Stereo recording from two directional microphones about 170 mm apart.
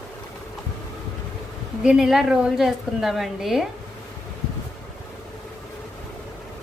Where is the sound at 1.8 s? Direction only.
5° right (ahead or behind).